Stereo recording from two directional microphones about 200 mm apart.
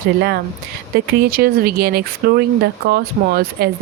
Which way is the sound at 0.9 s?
50° right (ahead or behind).